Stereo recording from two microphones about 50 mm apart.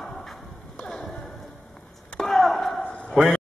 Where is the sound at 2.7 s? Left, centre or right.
Left.